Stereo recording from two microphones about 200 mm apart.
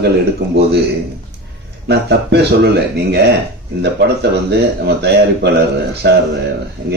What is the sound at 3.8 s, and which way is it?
Speech, 55° right (ahead or behind).